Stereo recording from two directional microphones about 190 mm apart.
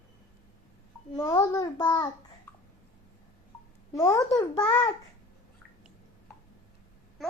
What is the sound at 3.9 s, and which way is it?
A child's voice, 20° left (ahead or behind).